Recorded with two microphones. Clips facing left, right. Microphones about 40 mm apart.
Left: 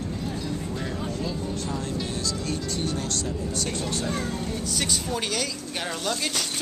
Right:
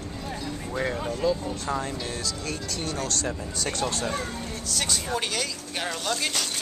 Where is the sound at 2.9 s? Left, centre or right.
Right.